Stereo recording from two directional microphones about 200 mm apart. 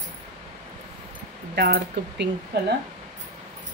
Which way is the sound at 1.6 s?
55° right (ahead or behind).